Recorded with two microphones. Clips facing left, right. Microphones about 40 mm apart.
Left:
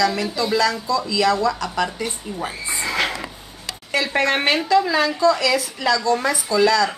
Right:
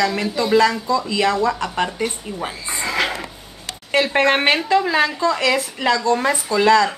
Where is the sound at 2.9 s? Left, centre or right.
Centre.